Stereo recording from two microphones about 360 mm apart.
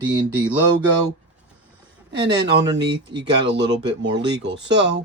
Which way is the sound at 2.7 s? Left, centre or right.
Right.